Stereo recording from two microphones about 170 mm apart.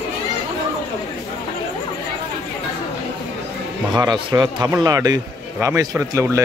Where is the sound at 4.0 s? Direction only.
20° right (ahead or behind).